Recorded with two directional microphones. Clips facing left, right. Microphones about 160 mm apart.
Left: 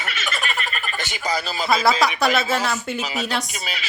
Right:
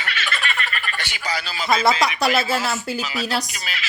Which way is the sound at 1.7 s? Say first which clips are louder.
Even; centre (ahead or behind).